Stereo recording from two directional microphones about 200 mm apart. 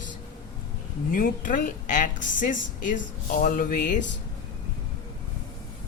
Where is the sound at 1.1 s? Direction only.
40° left (ahead or behind).